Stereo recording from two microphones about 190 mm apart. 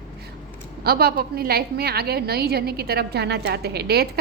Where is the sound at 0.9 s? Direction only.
55° right (ahead or behind).